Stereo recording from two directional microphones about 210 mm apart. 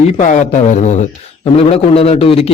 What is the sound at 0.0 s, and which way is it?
A man's voice, 35° left (ahead or behind).